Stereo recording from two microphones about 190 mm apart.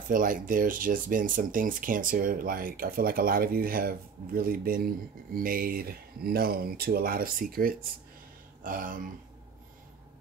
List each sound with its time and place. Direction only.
0.1 s speech: 45° right (ahead or behind)